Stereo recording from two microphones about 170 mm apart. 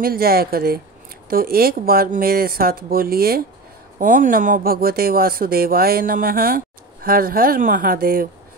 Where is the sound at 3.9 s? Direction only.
50° right (ahead or behind).